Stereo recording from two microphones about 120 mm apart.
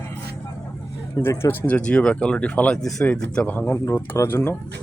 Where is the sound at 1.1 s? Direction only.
25° left (ahead or behind).